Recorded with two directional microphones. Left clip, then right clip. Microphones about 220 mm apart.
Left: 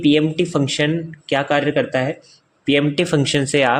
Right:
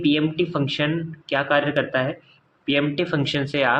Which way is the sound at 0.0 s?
35° left (ahead or behind).